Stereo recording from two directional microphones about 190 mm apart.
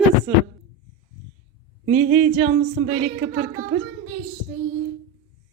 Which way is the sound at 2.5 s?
40° right (ahead or behind).